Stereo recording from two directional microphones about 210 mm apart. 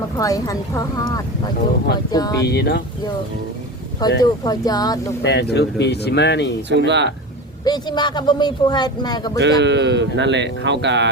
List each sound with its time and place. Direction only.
0.2 s a woman's voice: 15° left (ahead or behind)
2.5 s speech: 50° left (ahead or behind)
4.2 s a woman's voice: 20° left (ahead or behind)
5.2 s speech: 55° left (ahead or behind)
6.7 s speech: 55° right (ahead or behind)
7.6 s a man's voice: 20° left (ahead or behind)
9.6 s speech: 55° right (ahead or behind)